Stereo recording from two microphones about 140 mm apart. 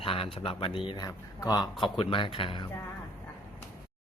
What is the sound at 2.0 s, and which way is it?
Speech, 40° left (ahead or behind).